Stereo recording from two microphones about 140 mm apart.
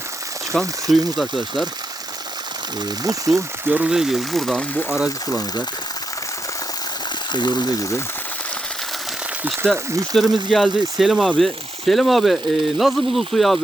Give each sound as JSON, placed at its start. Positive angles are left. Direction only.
{"t": 0.5, "sound": "speech", "side_deg": 0}
{"t": 3.0, "sound": "speech", "side_deg": -25}
{"t": 3.7, "sound": "speech", "side_deg": -10}
{"t": 5.3, "sound": "speech", "side_deg": 25}
{"t": 7.3, "sound": "speech", "side_deg": 30}
{"t": 9.7, "sound": "speech", "side_deg": -20}
{"t": 10.2, "sound": "speech", "side_deg": 0}